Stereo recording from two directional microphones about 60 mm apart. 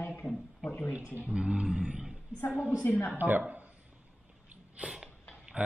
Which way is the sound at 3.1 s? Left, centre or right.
Right.